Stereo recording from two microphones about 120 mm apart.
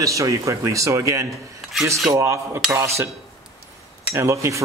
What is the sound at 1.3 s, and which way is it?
Speech, centre (ahead or behind).